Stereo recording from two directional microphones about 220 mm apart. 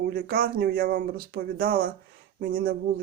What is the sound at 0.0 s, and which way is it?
Speech, 45° right (ahead or behind).